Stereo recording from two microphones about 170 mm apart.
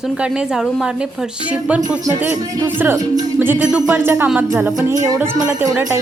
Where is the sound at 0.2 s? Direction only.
Centre (ahead or behind).